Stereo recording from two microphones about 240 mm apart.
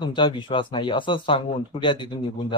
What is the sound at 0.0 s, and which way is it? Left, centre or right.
Speech, centre.